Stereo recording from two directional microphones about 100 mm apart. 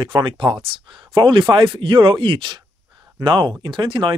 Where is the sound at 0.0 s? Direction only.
55° right (ahead or behind).